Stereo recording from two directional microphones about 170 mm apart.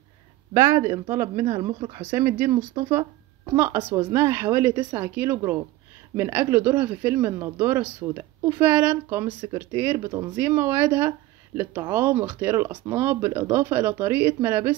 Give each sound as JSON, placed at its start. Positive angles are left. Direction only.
{"t": 0.6, "sound": "speech", "side_deg": -15}
{"t": 1.4, "sound": "speech", "side_deg": -30}
{"t": 2.0, "sound": "speech", "side_deg": -10}
{"t": 3.5, "sound": "speech", "side_deg": -15}